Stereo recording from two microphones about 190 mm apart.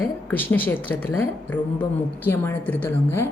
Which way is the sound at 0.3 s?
10° left (ahead or behind).